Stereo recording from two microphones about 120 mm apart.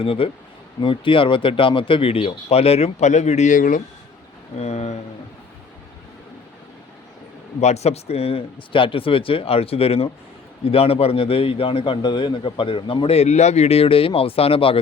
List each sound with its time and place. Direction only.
0.0 s a man's voice: 50° left (ahead or behind); by 3.6 s 80° left
4.5 s speech: 65° left (ahead or behind)
7.6 s a man's voice: 65° left (ahead or behind)